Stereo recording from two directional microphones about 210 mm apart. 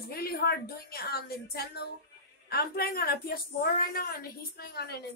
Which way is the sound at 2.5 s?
45° left (ahead or behind).